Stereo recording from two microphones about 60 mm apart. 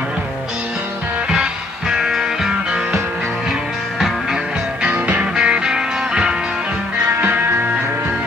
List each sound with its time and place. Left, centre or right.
1.3 s music: centre
4.8 s music: right